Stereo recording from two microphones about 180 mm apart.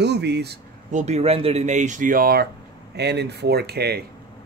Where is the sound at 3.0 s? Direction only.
70° right (ahead or behind).